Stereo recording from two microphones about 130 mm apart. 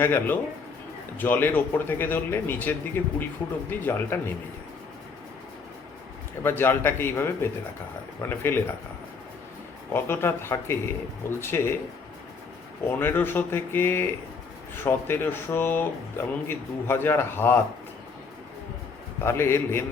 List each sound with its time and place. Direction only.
0.0 s speech: 15° left (ahead or behind)
6.4 s speech: 15° left (ahead or behind)
9.9 s speech: 20° left (ahead or behind)
13.0 s speech: 15° left (ahead or behind)
19.2 s speech: 20° left (ahead or behind)